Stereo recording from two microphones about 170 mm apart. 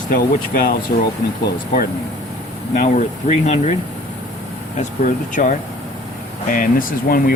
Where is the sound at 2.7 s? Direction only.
45° left (ahead or behind).